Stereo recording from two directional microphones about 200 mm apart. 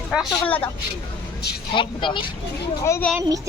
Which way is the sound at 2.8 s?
10° left (ahead or behind).